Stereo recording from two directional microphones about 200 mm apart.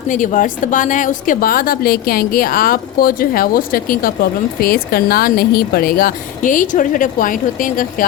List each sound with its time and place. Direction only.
0.1 s a woman's voice: 40° left (ahead or behind)